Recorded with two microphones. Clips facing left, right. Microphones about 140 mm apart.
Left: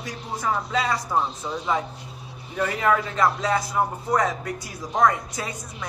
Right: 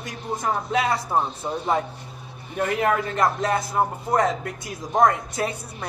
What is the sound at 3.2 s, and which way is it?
Speech, 55° right (ahead or behind).